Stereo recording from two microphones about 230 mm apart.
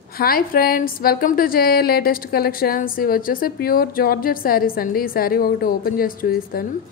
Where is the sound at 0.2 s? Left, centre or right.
Left.